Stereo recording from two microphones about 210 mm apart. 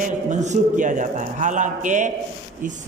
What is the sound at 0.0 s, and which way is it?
A man's voice, 35° right (ahead or behind).